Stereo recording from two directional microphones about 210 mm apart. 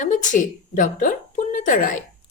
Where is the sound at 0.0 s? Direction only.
40° left (ahead or behind).